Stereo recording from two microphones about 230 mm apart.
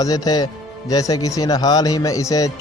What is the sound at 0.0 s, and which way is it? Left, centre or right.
A man's voice, centre.